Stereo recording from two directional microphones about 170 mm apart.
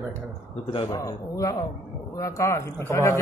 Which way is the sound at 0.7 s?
25° left (ahead or behind).